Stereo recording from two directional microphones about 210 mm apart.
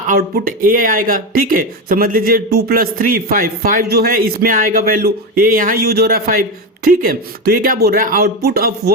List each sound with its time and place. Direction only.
0.1 s speech: 40° right (ahead or behind)